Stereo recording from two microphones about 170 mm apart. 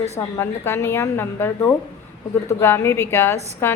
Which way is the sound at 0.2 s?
15° left (ahead or behind).